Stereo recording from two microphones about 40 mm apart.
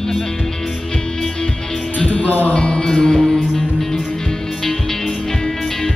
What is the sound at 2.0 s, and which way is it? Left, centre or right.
Music, left.